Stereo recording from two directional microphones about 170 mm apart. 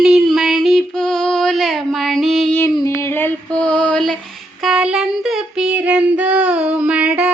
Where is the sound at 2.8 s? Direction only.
15° left (ahead or behind).